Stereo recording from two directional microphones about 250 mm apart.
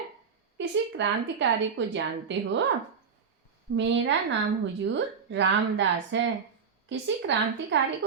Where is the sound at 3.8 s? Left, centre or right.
Right.